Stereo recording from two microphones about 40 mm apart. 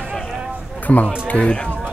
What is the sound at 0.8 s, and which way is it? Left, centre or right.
Speech, left.